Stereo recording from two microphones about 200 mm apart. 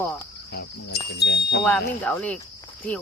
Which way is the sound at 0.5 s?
55° left (ahead or behind).